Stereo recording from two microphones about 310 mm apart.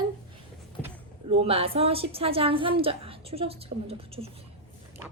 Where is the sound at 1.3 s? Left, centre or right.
Centre.